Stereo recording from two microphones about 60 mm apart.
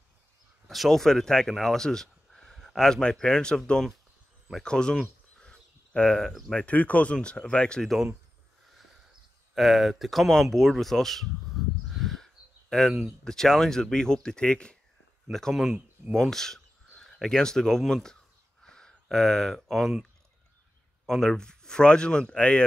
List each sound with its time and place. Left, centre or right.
0.7 s speech: centre
5.4 s a sound: centre
6.6 s speech: left
7.8 s speech: centre
9.6 s speech: centre
15.3 s speech: centre
18.6 s a sound: centre
19.0 s speech: centre
21.1 s speech: centre